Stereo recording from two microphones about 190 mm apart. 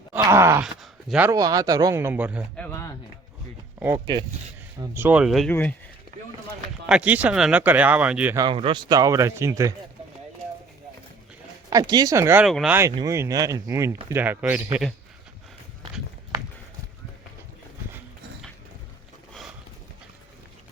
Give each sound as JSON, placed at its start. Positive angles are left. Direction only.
{"t": 0.2, "sound": "speech", "side_deg": -15}
{"t": 0.6, "sound": "speech", "side_deg": 0}
{"t": 1.3, "sound": "speech", "side_deg": -20}
{"t": 2.6, "sound": "a sound", "side_deg": 10}
{"t": 3.8, "sound": "speech", "side_deg": -15}
{"t": 4.8, "sound": "speech", "side_deg": -10}
{"t": 6.8, "sound": "speech", "side_deg": -5}
{"t": 8.4, "sound": "speech", "side_deg": -25}
{"t": 11.7, "sound": "speech", "side_deg": -20}
{"t": 12.5, "sound": "speech", "side_deg": 0}
{"t": 13.0, "sound": "speech", "side_deg": -15}